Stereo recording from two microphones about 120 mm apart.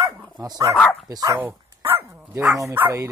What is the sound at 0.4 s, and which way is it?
Speech, 30° right (ahead or behind).